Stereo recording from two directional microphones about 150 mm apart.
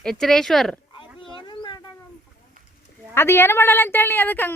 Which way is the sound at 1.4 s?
30° left (ahead or behind).